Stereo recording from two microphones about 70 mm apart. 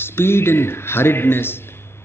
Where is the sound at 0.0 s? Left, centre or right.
Left.